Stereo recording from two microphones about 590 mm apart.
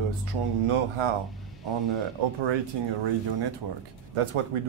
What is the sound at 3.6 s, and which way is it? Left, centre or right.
Speech, right.